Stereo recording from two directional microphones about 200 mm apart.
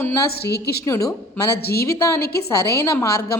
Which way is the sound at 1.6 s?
50° left (ahead or behind).